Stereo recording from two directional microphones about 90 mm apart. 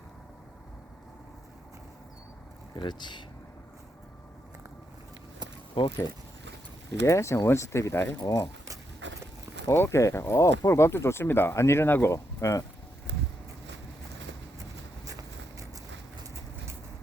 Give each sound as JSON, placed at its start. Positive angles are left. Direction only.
{"t": 2.7, "sound": "speech", "side_deg": 55}
{"t": 5.8, "sound": "speech", "side_deg": 70}
{"t": 7.0, "sound": "speech", "side_deg": 30}
{"t": 9.6, "sound": "speech", "side_deg": 30}
{"t": 12.1, "sound": "speech", "side_deg": 35}
{"t": 15.0, "sound": "vehicle", "side_deg": -40}